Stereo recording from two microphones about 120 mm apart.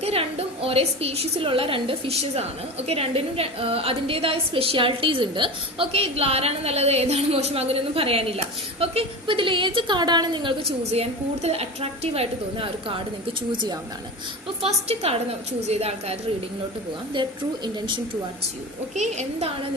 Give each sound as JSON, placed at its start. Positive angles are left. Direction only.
{"t": 0.0, "sound": "a woman's voice", "side_deg": -55}
{"t": 10.6, "sound": "a woman's voice", "side_deg": -55}
{"t": 13.5, "sound": "speech", "side_deg": -40}
{"t": 14.6, "sound": "a woman's voice", "side_deg": -60}
{"t": 17.2, "sound": "a woman's voice", "side_deg": -40}
{"t": 18.9, "sound": "a woman's voice", "side_deg": -75}